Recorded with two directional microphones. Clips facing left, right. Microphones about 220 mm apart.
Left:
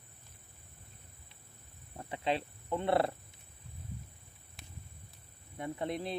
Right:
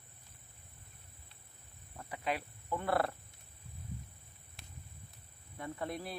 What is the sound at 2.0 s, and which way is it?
Speech, 25° left (ahead or behind).